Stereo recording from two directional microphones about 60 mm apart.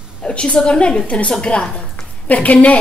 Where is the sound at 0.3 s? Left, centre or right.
Centre.